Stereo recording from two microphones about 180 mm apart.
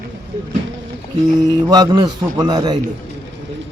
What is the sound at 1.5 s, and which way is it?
A man's voice, 20° right (ahead or behind).